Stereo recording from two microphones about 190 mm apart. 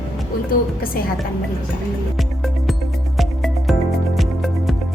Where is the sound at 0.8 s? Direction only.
50° left (ahead or behind).